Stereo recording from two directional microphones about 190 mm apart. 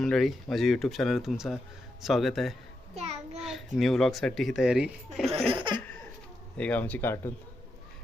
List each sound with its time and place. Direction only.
0.0 s speech: centre (ahead or behind)
2.9 s a sound: 35° right (ahead or behind)
3.3 s a sound: centre (ahead or behind)
3.8 s speech: centre (ahead or behind)
5.5 s laughter: 25° right (ahead or behind)
6.6 s speech: 10° left (ahead or behind)